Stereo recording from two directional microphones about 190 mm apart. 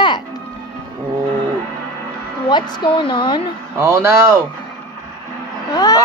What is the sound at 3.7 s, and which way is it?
Speech, 15° right (ahead or behind).